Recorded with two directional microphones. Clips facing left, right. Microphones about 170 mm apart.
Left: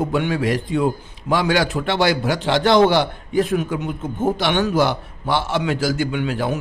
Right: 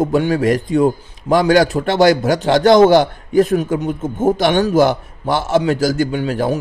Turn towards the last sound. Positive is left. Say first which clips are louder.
# right 4 dB
turn(degrees=-40)  # may be behind; listen again after turning